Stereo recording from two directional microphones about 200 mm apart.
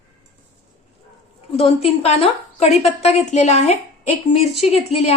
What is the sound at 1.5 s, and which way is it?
A woman's voice, 30° left (ahead or behind).